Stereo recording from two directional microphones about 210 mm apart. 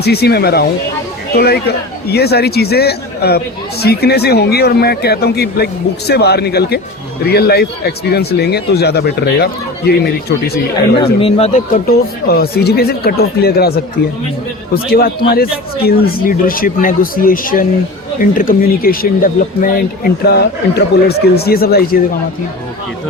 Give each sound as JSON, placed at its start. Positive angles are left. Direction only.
{"t": 0.0, "sound": "speech", "side_deg": 50}
{"t": 11.0, "sound": "speech", "side_deg": 25}
{"t": 14.8, "sound": "speech", "side_deg": 45}